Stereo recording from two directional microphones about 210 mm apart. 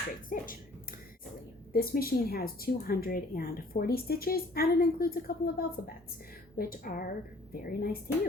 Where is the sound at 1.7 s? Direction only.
45° left (ahead or behind).